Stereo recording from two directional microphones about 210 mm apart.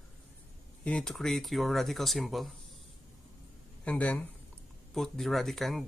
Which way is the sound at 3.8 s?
5° left (ahead or behind).